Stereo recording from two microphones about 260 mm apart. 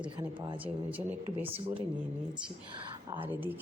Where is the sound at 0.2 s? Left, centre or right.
Centre.